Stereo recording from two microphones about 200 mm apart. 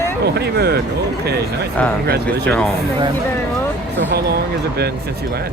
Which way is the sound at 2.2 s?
5° left (ahead or behind).